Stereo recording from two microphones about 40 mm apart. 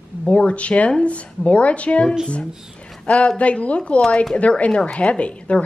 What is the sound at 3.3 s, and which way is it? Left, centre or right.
Speech, left.